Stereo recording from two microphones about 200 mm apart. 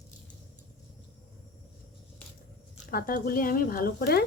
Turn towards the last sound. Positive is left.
turn(degrees=50)  # may be behind; listen again after turning